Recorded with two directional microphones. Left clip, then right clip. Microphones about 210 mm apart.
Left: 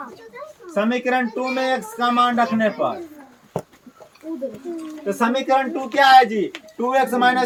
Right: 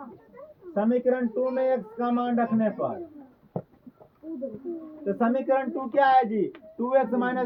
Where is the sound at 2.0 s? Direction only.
15° left (ahead or behind).